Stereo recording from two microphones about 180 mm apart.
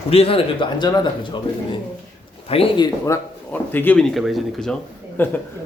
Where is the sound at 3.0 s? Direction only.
15° left (ahead or behind).